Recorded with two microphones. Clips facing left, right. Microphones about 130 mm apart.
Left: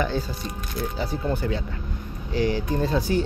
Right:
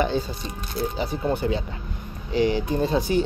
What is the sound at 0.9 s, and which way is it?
Speech, 20° right (ahead or behind).